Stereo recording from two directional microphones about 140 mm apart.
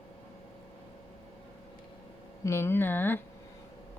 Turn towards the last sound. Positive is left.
turn(degrees=15)  # may be behind; listen again after turning